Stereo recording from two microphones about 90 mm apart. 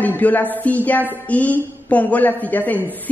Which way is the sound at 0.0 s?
20° left (ahead or behind).